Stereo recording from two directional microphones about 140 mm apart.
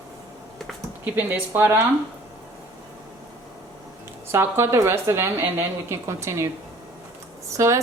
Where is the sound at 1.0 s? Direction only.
15° right (ahead or behind).